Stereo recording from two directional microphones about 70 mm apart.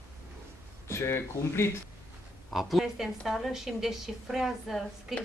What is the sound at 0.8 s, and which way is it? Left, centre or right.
Speech, left.